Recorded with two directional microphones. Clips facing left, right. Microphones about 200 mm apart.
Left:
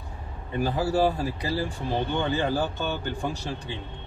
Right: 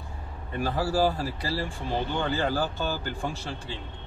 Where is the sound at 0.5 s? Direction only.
20° left (ahead or behind).